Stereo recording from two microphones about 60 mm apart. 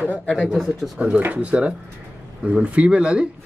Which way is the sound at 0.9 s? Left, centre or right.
Right.